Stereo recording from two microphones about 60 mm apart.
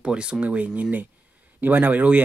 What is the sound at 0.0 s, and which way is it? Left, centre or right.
Speech, centre.